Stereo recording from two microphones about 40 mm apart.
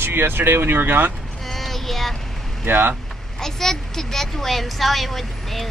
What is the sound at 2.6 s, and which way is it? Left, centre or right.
Speech, right.